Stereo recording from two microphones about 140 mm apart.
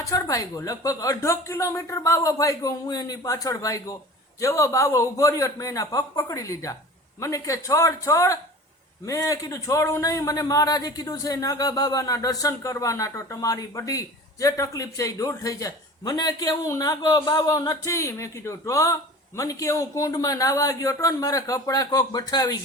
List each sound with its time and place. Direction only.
0.0 s a man's voice: 25° left (ahead or behind)